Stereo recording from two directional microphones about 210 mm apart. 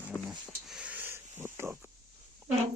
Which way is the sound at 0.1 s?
Centre (ahead or behind).